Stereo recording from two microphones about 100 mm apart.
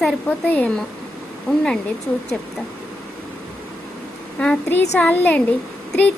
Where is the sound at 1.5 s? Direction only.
5° left (ahead or behind).